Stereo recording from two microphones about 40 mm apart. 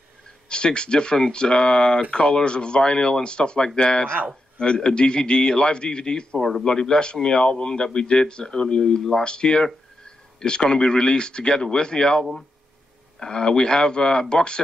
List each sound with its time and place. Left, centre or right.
0.5 s a man's voice: left